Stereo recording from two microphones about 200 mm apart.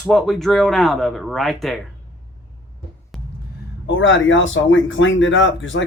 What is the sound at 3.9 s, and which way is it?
Speech, 70° left (ahead or behind).